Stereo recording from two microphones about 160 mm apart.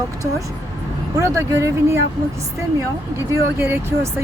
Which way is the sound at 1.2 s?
20° right (ahead or behind).